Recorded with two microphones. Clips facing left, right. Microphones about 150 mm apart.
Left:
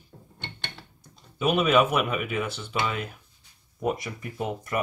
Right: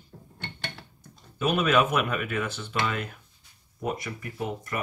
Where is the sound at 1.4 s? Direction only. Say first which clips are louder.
Left 2 dB; 5° left (ahead or behind).